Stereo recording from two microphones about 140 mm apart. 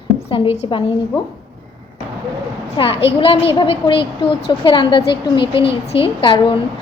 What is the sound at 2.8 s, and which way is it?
A woman's voice, 40° left (ahead or behind).